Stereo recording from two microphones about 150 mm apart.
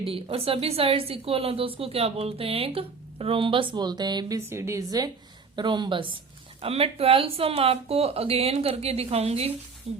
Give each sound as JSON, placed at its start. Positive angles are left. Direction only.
{"t": 0.1, "sound": "a woman's voice", "side_deg": -40}